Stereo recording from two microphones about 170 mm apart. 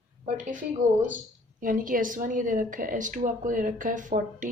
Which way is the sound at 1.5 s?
50° right (ahead or behind).